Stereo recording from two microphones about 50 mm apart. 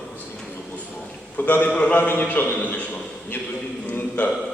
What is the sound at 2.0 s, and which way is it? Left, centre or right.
Speech, left.